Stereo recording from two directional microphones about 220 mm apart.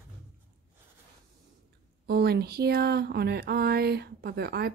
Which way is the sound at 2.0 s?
45° right (ahead or behind).